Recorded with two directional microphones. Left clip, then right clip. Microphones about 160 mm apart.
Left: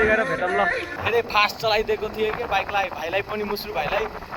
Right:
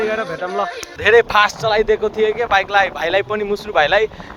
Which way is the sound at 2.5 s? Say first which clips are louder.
Right 8 dB; 45° right (ahead or behind).